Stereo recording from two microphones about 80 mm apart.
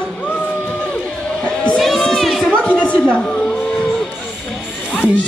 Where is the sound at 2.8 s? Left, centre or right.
Centre.